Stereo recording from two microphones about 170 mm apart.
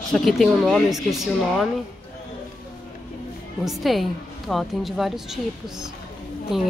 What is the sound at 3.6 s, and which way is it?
Speech, centre (ahead or behind).